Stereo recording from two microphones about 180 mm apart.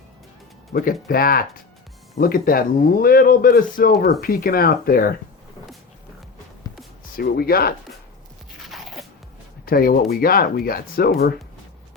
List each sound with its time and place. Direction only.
0.7 s a man's voice: 55° left (ahead or behind)
7.2 s a man's voice: 60° left (ahead or behind)
8.6 s crunch: centre (ahead or behind)
9.6 s a man's voice: 55° left (ahead or behind)